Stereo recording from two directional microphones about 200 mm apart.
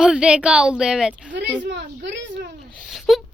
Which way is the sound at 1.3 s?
60° right (ahead or behind).